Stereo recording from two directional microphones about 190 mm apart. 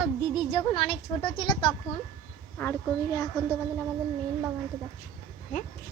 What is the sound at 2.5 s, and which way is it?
Speech, 10° left (ahead or behind).